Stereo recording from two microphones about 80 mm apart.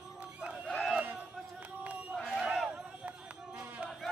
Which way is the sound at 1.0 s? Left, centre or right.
Centre.